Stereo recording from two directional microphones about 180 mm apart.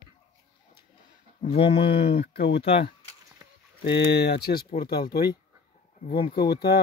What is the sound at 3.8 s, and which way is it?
Speech, 70° left (ahead or behind).